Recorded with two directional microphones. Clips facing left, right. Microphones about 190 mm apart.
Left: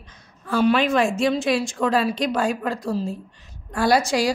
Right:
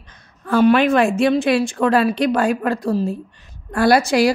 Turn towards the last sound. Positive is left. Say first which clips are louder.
# right 5 dB
turn(degrees=-60)  # may be behind; listen again after turning